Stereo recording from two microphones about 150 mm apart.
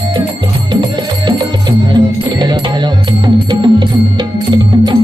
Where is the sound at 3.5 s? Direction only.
30° right (ahead or behind).